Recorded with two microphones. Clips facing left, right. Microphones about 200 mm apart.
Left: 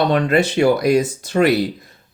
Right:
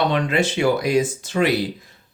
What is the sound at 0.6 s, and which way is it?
Speech, 45° left (ahead or behind).